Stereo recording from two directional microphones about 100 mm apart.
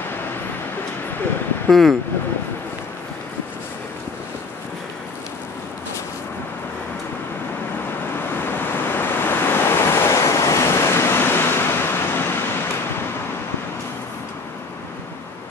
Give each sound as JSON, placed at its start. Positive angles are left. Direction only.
{"t": 1.7, "sound": "speech", "side_deg": 0}
{"t": 8.4, "sound": "waves", "side_deg": 20}